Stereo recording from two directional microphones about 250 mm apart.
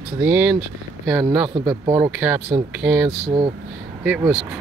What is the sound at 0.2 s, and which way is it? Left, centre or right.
Speech, centre.